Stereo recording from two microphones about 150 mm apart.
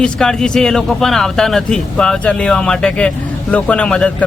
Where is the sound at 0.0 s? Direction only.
5° left (ahead or behind).